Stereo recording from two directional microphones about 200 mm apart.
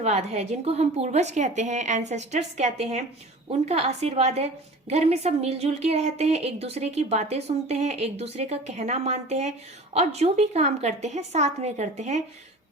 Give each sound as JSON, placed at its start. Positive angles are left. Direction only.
{"t": 0.0, "sound": "a woman's voice", "side_deg": -35}